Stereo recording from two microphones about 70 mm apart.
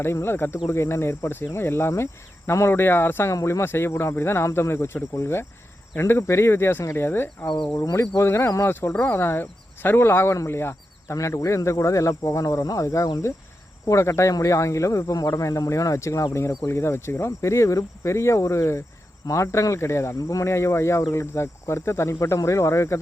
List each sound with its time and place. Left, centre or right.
0.0 s speech: left
8.9 s speech: left
11.1 s speech: left